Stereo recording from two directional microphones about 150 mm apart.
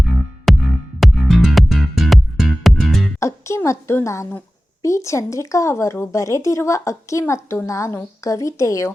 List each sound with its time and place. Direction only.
0.1 s music: centre (ahead or behind)
3.2 s a woman's voice: 20° left (ahead or behind)